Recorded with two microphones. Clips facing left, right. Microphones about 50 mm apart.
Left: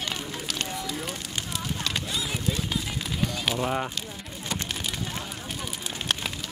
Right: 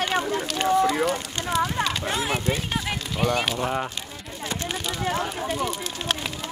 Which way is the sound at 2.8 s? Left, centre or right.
Right.